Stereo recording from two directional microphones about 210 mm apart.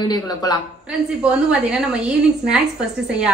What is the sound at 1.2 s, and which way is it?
A woman's voice, 5° right (ahead or behind).